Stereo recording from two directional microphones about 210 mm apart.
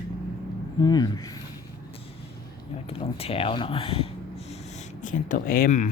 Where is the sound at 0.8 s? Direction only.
20° left (ahead or behind).